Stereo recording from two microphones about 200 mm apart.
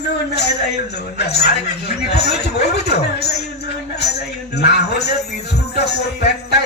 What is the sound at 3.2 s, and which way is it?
Music, 55° left (ahead or behind).